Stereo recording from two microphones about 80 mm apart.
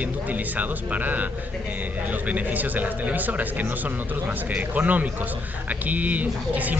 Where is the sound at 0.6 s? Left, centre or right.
Right.